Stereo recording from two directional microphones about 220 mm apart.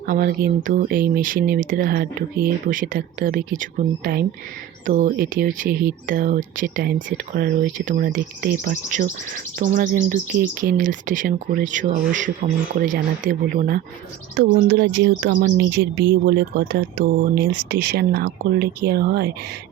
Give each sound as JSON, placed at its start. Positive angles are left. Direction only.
{"t": 0.0, "sound": "cricket", "side_deg": -40}
{"t": 14.3, "sound": "speech", "side_deg": -50}